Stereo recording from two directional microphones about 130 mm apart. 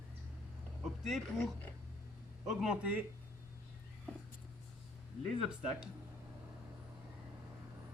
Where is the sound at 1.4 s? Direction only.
15° left (ahead or behind).